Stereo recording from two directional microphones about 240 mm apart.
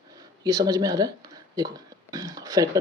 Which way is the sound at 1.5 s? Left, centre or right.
Centre.